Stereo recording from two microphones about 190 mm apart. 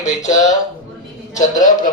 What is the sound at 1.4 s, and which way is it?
Speech, 40° left (ahead or behind).